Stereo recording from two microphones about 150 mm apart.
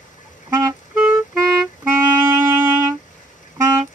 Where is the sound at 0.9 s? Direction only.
5° right (ahead or behind).